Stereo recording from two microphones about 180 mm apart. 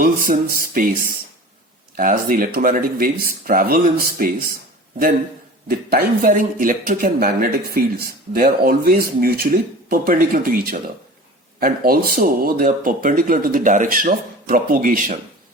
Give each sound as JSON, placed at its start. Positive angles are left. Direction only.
{"t": 0.0, "sound": "speech", "side_deg": -50}
{"t": 5.6, "sound": "speech", "side_deg": -60}